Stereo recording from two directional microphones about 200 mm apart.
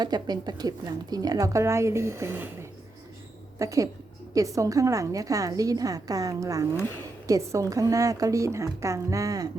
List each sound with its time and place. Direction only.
0.0 s a woman's voice: 20° right (ahead or behind)